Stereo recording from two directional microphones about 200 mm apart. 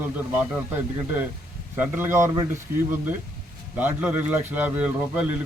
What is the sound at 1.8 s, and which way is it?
Speech, 10° right (ahead or behind).